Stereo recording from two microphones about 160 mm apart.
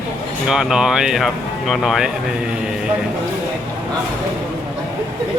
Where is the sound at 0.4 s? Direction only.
5° right (ahead or behind).